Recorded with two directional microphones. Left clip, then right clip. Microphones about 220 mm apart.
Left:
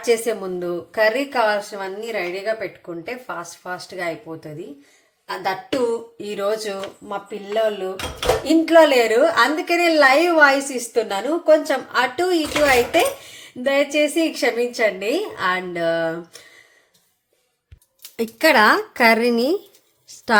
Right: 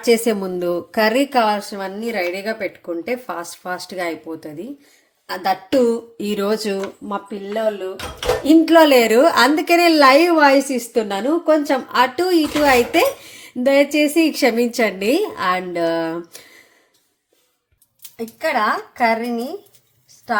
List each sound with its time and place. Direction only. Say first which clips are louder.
0.0 s a woman's voice: right 3 dB; 40° right (ahead or behind)
8.4 s a woman's voice: right 2 dB; 35° right (ahead or behind)
18.2 s speech: left 5 dB; 50° left (ahead or behind)
20.1 s a sound: left 4 dB; 45° left (ahead or behind)